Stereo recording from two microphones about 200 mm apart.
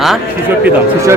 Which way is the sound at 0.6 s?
15° right (ahead or behind).